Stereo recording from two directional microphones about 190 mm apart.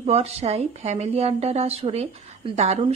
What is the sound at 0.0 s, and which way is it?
A woman's voice, 35° right (ahead or behind).